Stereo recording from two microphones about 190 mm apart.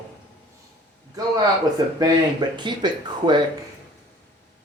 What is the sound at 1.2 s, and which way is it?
Speech, 20° right (ahead or behind).